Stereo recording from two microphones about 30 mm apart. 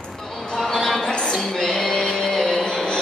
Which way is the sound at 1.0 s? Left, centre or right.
Left.